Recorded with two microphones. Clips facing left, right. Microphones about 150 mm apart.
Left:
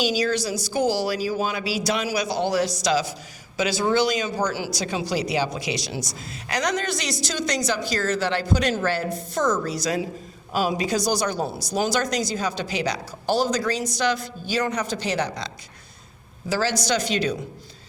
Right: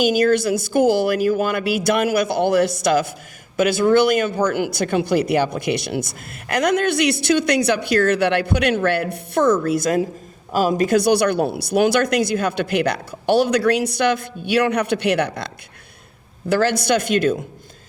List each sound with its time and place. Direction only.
0.0 s speech: 55° right (ahead or behind)